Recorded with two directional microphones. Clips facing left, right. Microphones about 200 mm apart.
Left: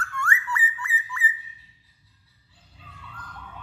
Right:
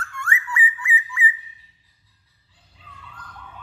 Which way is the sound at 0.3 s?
15° right (ahead or behind).